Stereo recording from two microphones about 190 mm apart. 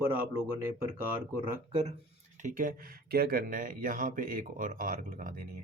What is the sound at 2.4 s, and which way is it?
Speech, 45° right (ahead or behind).